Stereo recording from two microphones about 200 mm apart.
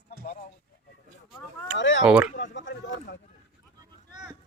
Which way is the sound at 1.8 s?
65° left (ahead or behind).